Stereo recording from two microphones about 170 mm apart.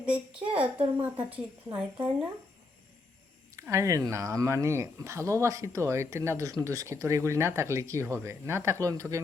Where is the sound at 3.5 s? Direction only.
15° right (ahead or behind).